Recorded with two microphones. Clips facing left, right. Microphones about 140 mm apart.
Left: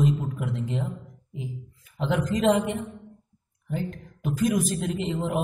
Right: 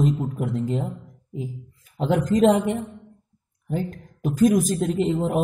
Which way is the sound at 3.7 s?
40° right (ahead or behind).